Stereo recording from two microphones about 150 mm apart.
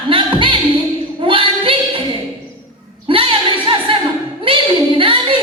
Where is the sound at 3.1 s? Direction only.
35° right (ahead or behind).